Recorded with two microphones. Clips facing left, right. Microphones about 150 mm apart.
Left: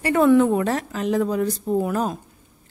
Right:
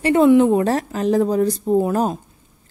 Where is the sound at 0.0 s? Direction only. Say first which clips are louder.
Right 3 dB; 20° right (ahead or behind).